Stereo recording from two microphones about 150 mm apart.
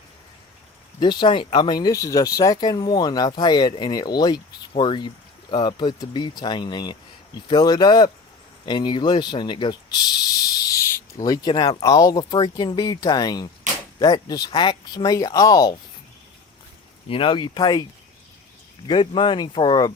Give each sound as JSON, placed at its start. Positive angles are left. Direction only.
{"t": 0.9, "sound": "speech", "side_deg": 30}
{"t": 17.1, "sound": "speech", "side_deg": 35}
{"t": 18.9, "sound": "speech", "side_deg": 35}